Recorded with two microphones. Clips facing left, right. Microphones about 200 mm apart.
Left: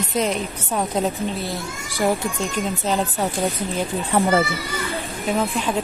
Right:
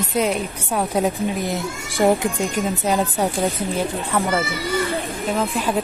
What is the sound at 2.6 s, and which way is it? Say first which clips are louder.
Speech: right 1 dB; 10° right (ahead or behind).